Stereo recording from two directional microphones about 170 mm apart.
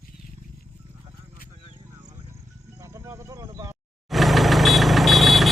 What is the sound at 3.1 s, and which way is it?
Cricket, 15° right (ahead or behind).